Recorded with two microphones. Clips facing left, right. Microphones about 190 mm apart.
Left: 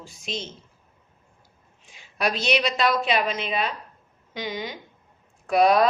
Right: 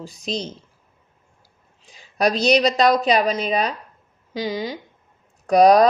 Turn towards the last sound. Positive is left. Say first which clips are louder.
# right 6 dB
turn(degrees=-40)  # may be behind; listen again after turning